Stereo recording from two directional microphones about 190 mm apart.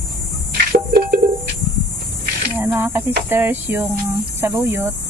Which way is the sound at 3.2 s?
10° right (ahead or behind).